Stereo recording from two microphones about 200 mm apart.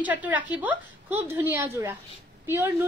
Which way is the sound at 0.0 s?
10° right (ahead or behind).